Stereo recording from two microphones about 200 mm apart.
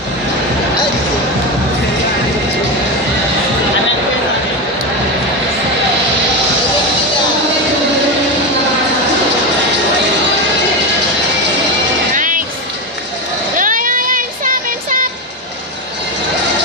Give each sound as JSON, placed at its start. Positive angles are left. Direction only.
{"t": 12.1, "sound": "music", "side_deg": -40}
{"t": 13.6, "sound": "music", "side_deg": -40}